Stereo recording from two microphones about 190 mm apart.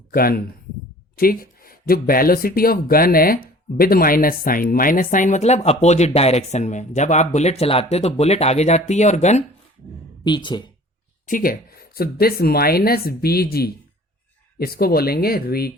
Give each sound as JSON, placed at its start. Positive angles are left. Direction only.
{"t": 0.1, "sound": "speech", "side_deg": 50}
{"t": 10.2, "sound": "speech", "side_deg": 25}
{"t": 11.3, "sound": "speech", "side_deg": 50}